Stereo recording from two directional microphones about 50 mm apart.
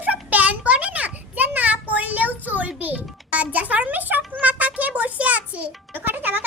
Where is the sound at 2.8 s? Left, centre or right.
Right.